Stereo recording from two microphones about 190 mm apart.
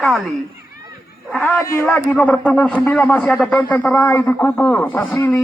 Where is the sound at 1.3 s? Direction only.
10° left (ahead or behind).